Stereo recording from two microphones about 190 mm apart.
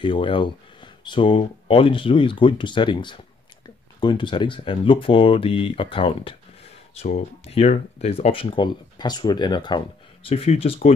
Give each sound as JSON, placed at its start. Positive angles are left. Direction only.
{"t": 0.0, "sound": "speech", "side_deg": 25}